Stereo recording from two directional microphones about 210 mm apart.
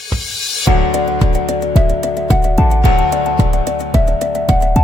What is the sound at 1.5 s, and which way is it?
Music, centre (ahead or behind).